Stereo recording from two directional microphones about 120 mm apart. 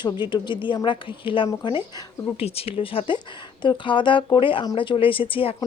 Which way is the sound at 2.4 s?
55° left (ahead or behind).